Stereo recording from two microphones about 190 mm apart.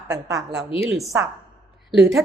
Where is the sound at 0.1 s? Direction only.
15° right (ahead or behind).